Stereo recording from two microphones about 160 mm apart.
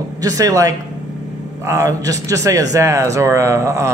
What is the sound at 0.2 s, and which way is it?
A man's voice, 20° right (ahead or behind).